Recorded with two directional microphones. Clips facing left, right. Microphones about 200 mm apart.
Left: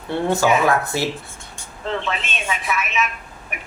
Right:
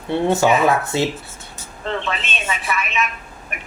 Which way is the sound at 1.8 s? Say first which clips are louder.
Even; centre (ahead or behind).